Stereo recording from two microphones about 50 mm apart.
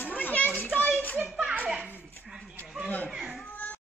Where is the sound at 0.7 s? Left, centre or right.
Left.